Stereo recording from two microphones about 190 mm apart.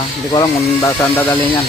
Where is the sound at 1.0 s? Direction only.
10° left (ahead or behind).